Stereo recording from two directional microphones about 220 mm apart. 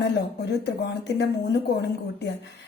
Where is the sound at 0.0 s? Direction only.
50° left (ahead or behind).